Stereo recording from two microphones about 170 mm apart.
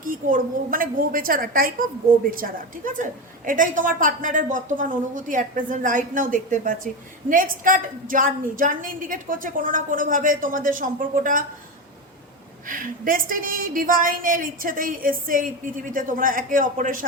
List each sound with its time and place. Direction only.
0.0 s a woman's voice: 55° right (ahead or behind)
12.6 s a woman's voice: 55° right (ahead or behind)